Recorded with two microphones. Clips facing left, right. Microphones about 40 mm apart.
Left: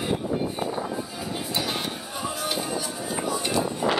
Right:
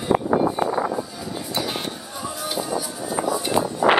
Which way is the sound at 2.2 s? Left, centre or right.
Centre.